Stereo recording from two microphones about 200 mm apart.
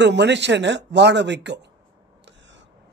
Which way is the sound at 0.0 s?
60° right (ahead or behind).